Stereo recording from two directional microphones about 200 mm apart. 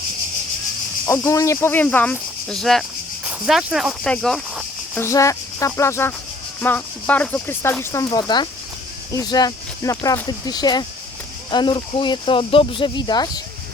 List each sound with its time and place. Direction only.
1.0 s speech: 15° left (ahead or behind)
4.9 s speech: 15° left (ahead or behind)